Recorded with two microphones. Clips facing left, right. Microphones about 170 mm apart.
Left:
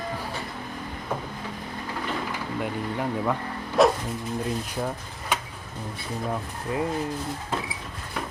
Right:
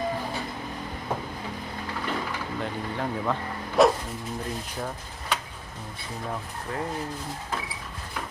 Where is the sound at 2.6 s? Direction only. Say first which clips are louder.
Left 3 dB; 10° left (ahead or behind).